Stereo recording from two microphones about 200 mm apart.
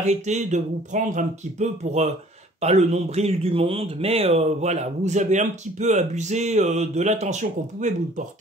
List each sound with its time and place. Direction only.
0.0 s speech: 35° right (ahead or behind)